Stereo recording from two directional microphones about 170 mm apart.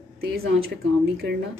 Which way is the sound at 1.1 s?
75° right (ahead or behind).